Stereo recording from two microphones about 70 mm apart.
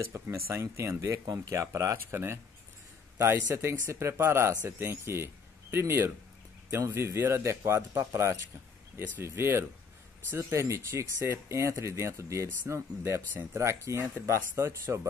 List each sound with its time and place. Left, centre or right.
0.0 s speech: right
1.2 s speech: right
13.3 s speech: right
13.6 s speech: right